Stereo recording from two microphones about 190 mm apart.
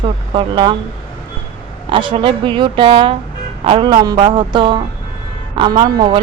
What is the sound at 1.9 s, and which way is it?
A woman's voice, 25° right (ahead or behind).